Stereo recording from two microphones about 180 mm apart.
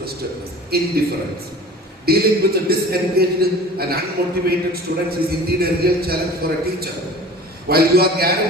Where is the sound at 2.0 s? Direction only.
60° right (ahead or behind).